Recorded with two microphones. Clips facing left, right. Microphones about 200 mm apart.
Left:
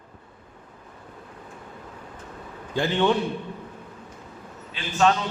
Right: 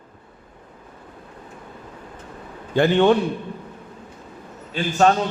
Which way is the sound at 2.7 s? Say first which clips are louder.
Right 6 dB; 55° right (ahead or behind).